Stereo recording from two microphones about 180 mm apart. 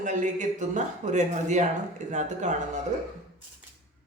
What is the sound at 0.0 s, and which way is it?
Speech, 40° right (ahead or behind).